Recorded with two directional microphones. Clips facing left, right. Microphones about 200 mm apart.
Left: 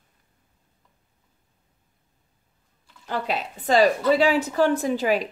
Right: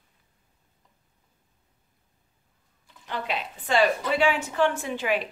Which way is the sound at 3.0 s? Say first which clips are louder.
Left 4 dB; 40° left (ahead or behind).